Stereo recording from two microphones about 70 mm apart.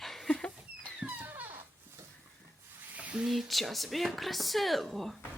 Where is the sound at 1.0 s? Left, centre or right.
Right.